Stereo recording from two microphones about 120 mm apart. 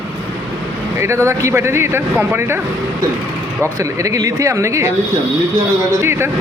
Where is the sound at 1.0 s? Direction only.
20° right (ahead or behind).